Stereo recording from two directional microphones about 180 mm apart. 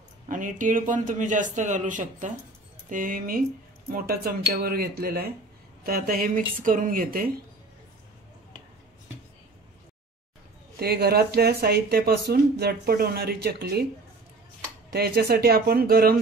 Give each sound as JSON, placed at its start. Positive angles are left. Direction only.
{"t": 0.3, "sound": "a man's voice", "side_deg": -45}
{"t": 10.8, "sound": "speech", "side_deg": -60}
{"t": 14.9, "sound": "speech", "side_deg": -60}